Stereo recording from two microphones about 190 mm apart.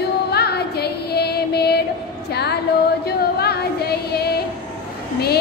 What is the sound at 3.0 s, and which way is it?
Music, 55° left (ahead or behind).